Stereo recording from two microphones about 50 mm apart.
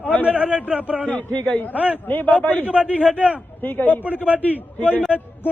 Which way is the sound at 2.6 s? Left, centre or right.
Right.